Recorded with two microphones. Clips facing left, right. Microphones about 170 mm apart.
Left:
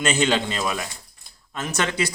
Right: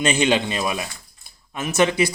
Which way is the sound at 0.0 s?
15° right (ahead or behind).